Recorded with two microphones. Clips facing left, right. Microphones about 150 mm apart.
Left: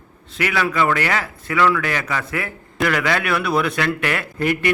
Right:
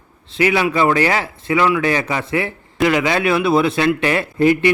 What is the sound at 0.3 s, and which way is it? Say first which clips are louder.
A man's voice: right 5 dB; 25° right (ahead or behind).